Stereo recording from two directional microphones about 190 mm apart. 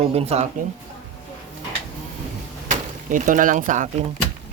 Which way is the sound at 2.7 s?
45° right (ahead or behind).